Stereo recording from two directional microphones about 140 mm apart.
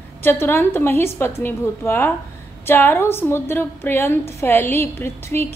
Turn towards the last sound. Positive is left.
turn(degrees=15)  # may be behind; listen again after turning